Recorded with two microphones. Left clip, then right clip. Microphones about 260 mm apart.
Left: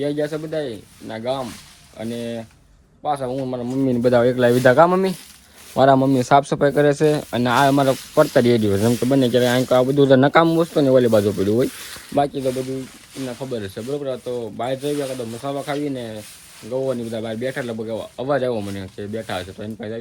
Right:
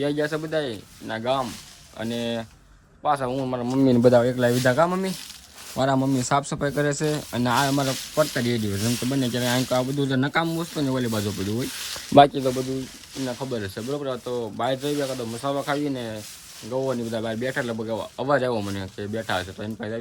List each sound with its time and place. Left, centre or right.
0.0 s speech: centre
3.8 s speech: right
4.2 s speech: centre
8.4 s speech: left
8.9 s speech: centre
13.2 s speech: centre